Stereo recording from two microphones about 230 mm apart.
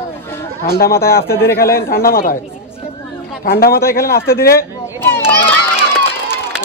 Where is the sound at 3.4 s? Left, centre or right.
Left.